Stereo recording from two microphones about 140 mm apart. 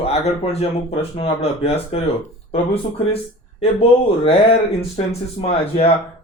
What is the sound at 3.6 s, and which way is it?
Speech, 40° left (ahead or behind).